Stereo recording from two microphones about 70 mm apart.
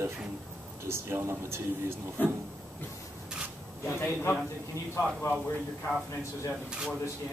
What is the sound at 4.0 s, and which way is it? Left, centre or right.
A man's voice, left.